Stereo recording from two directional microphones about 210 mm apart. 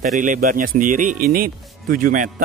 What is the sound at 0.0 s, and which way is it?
A man's voice, 40° right (ahead or behind).